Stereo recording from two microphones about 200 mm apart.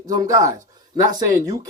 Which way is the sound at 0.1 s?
15° right (ahead or behind).